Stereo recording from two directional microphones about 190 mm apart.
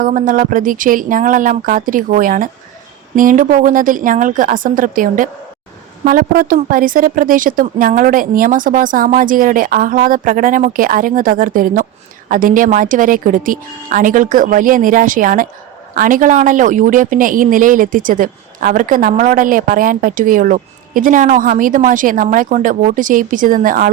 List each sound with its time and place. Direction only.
0.0 s a woman's voice: 45° right (ahead or behind)